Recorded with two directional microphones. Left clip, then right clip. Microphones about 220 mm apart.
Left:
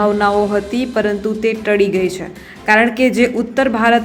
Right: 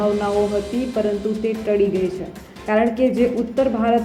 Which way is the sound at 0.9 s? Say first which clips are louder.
Left 4 dB; 20° left (ahead or behind).